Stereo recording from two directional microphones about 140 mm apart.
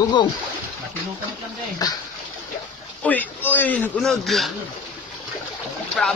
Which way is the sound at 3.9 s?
Centre (ahead or behind).